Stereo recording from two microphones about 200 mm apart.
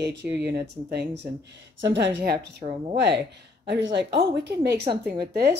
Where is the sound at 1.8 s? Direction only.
60° right (ahead or behind).